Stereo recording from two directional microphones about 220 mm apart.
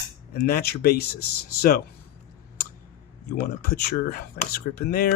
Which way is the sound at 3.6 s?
45° left (ahead or behind).